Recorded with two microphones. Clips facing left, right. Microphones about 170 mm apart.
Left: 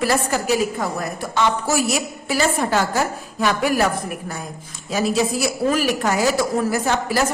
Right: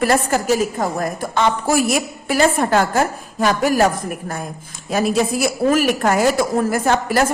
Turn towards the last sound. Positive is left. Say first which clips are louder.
# right 3 dB
turn(degrees=-50)  # may be behind; listen again after turning